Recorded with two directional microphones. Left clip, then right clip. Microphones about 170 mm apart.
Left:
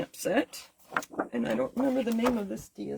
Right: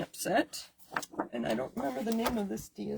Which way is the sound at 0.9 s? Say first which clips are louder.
Left 4 dB; 20° left (ahead or behind).